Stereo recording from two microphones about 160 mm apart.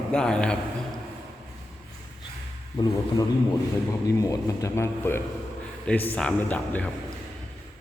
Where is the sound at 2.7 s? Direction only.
25° left (ahead or behind); by 6.8 s 10° left (ahead or behind).